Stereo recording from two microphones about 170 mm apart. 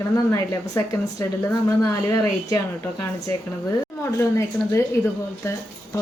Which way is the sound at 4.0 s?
15° left (ahead or behind).